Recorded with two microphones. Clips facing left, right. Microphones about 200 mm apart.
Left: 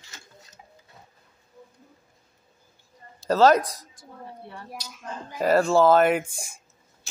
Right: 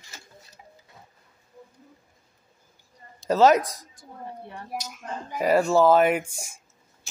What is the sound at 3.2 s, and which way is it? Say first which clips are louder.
Speech: even; 15° right (ahead or behind).